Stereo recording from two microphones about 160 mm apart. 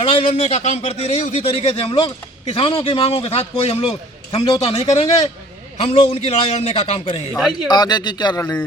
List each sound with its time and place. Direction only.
0.1 s a man's voice: 35° left (ahead or behind)